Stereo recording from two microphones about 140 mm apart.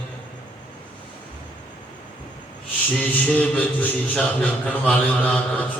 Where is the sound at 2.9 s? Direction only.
10° left (ahead or behind).